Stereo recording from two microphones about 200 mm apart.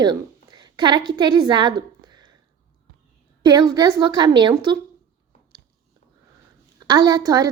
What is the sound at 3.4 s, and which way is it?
A woman's voice, 20° right (ahead or behind).